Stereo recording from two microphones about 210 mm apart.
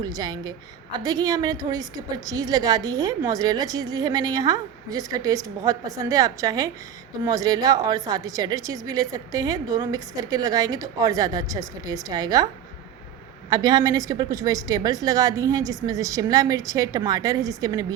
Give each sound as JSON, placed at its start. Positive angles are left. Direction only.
{"t": 0.0, "sound": "a woman's voice", "side_deg": -20}
{"t": 13.5, "sound": "a woman's voice", "side_deg": -20}